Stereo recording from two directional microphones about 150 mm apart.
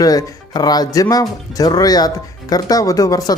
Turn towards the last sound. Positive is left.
turn(degrees=25)  # may be behind; listen again after turning